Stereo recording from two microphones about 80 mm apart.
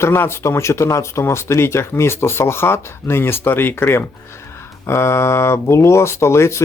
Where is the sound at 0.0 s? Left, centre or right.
Left.